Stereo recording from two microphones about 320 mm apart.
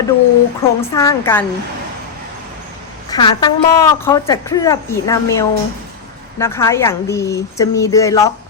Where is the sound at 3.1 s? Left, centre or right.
Centre.